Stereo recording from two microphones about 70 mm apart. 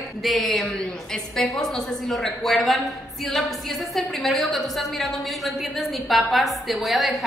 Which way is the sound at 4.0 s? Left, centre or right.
Centre.